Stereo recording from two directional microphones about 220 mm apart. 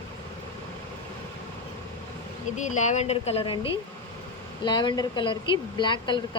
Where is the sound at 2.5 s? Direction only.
35° left (ahead or behind).